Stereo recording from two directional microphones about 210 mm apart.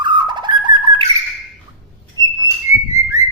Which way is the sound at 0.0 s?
20° right (ahead or behind).